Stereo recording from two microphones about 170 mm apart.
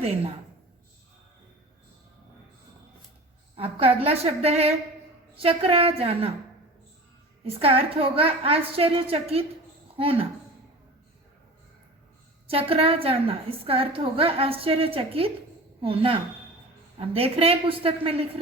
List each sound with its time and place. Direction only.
3.5 s a woman's voice: 35° right (ahead or behind)
7.4 s a woman's voice: 35° right (ahead or behind)
12.5 s a woman's voice: 35° right (ahead or behind)